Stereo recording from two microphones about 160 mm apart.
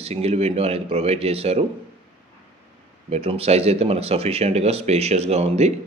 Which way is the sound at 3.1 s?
40° right (ahead or behind).